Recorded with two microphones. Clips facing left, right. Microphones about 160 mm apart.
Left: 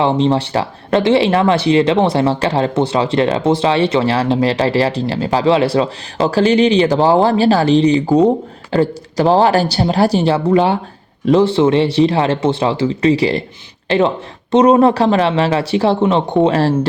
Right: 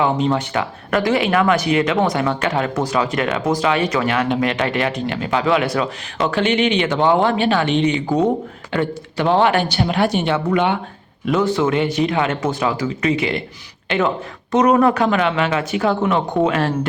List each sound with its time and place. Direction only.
0.0 s speech: 30° left (ahead or behind)